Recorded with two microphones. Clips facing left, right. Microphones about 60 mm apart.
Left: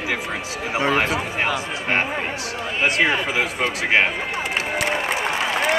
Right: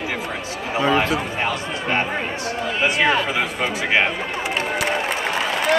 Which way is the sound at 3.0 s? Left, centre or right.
Centre.